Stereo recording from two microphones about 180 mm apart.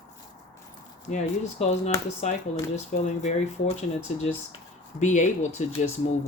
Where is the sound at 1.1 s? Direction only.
45° left (ahead or behind).